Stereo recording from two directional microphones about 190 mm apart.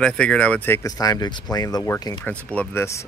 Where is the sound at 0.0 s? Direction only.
5° left (ahead or behind).